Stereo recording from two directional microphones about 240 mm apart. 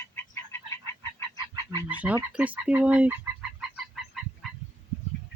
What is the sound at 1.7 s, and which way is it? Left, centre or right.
Fowl, centre.